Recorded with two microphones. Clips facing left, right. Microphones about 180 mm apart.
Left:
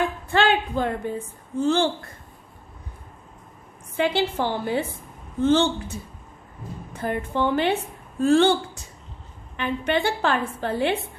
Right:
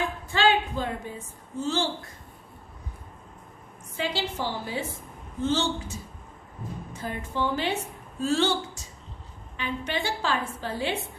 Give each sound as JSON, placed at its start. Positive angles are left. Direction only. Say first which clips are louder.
{"t": 0.3, "sound": "a woman's voice", "louder": "left 1 dB", "side_deg": 55}
{"t": 3.9, "sound": "a woman's voice", "louder": "left 7 dB", "side_deg": 55}